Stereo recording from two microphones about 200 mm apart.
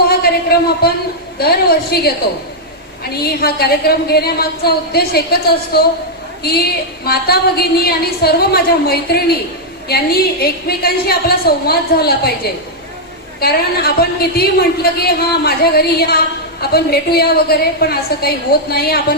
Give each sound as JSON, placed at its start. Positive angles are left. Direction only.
{"t": 0.8, "sound": "a woman's voice", "side_deg": 50}